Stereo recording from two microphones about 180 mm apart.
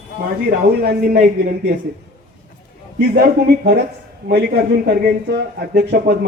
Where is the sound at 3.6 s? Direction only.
60° right (ahead or behind).